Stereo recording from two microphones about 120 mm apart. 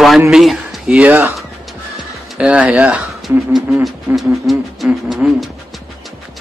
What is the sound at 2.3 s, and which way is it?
Speech, 10° right (ahead or behind).